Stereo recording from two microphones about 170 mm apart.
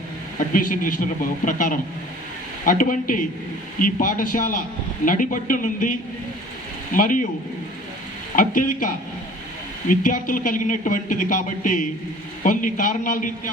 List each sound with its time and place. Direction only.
0.3 s speech: 50° left (ahead or behind)
9.9 s speech: 50° left (ahead or behind)